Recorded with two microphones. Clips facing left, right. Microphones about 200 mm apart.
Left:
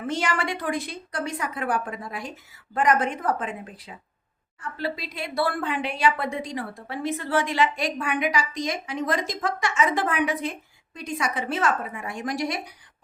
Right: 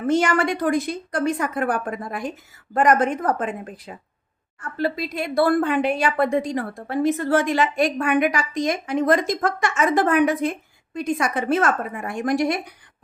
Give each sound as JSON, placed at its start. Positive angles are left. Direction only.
{"t": 0.1, "sound": "a woman's voice", "side_deg": -45}